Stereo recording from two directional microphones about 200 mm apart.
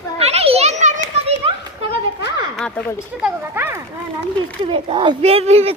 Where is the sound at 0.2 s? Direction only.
30° right (ahead or behind).